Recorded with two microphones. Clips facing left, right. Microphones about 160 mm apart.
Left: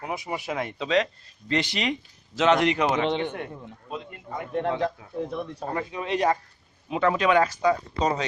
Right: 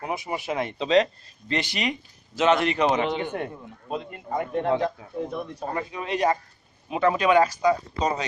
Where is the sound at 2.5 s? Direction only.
15° left (ahead or behind).